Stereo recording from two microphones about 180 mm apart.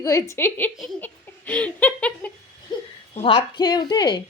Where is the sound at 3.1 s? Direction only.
30° left (ahead or behind).